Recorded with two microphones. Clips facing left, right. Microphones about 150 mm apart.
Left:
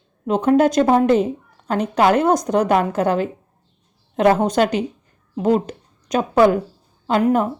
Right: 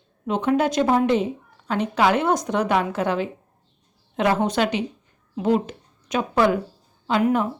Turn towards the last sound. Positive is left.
turn(degrees=40)  # may be behind; listen again after turning